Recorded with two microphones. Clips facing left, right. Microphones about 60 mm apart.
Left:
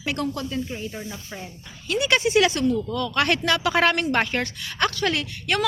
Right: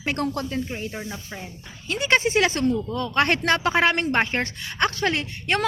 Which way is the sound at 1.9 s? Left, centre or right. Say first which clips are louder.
Even; right.